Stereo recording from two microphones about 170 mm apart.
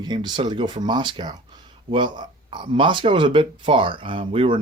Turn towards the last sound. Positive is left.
turn(degrees=-35)  # may be behind; listen again after turning